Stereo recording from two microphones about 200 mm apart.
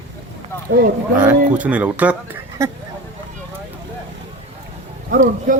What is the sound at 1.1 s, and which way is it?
Speech, 5° right (ahead or behind).